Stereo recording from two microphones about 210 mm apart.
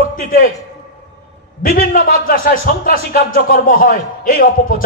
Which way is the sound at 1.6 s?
45° left (ahead or behind).